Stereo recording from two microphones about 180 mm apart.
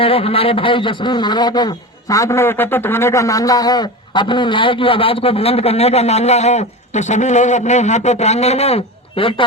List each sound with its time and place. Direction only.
0.0 s a man's voice: 30° left (ahead or behind)